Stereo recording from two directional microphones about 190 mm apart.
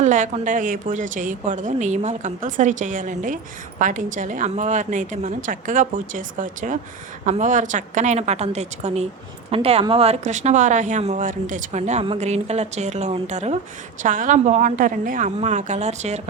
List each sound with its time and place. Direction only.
0.0 s a woman's voice: 40° right (ahead or behind)